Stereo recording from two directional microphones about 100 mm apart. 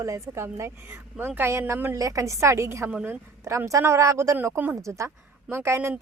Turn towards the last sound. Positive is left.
turn(degrees=-15)  # may be behind; listen again after turning